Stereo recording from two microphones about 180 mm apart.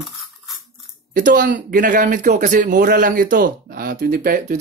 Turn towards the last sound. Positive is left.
turn(degrees=-55)  # may be behind; listen again after turning